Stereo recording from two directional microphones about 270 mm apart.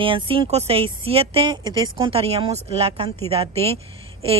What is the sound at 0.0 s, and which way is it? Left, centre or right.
Speech, centre.